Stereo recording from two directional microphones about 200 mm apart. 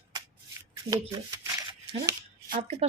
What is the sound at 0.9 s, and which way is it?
Speech, 15° right (ahead or behind).